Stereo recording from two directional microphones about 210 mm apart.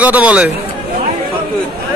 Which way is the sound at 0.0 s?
5° right (ahead or behind).